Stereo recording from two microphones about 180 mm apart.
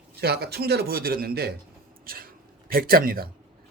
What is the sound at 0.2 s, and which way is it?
A man's voice, 65° right (ahead or behind).